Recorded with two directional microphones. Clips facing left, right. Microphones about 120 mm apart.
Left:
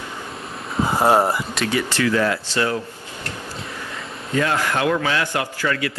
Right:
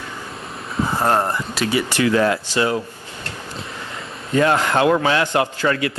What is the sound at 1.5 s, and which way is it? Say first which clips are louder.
Speech: right 2 dB; 5° right (ahead or behind).